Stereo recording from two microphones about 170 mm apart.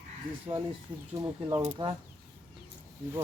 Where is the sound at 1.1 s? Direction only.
20° right (ahead or behind).